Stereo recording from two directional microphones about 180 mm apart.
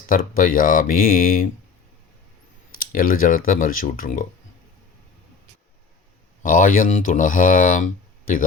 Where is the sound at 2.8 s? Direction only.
50° left (ahead or behind).